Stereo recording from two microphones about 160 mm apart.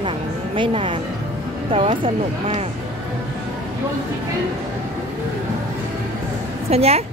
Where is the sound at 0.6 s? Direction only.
35° right (ahead or behind).